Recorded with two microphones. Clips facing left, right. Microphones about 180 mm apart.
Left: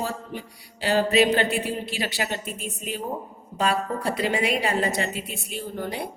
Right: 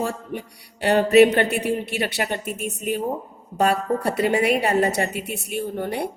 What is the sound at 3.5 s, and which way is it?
Speech, 60° right (ahead or behind).